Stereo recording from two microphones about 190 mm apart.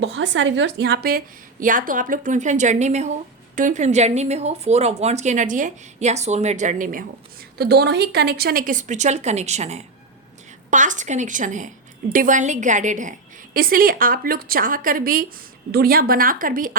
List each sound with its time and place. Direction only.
0.0 s a woman's voice: 75° right (ahead or behind); by 7.0 s 45° right (ahead or behind)
7.6 s a woman's voice: 60° right (ahead or behind)